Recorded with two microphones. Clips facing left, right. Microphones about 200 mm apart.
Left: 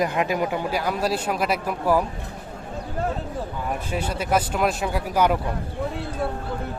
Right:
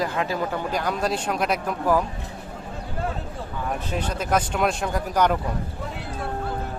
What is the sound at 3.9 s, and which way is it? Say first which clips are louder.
Speech: left 1 dB; 10° left (ahead or behind).